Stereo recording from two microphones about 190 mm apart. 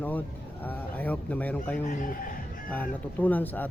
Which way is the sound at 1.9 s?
45° left (ahead or behind).